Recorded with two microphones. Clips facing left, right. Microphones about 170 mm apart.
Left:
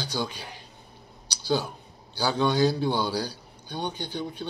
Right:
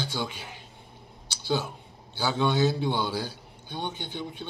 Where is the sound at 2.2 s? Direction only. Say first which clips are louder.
Left 2 dB; 20° right (ahead or behind).